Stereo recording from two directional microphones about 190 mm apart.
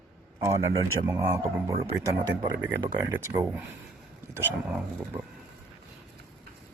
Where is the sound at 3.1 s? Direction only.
10° right (ahead or behind).